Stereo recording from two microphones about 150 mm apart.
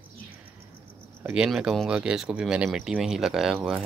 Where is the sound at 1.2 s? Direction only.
15° right (ahead or behind).